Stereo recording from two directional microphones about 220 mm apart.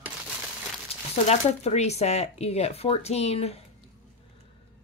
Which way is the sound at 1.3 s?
30° left (ahead or behind).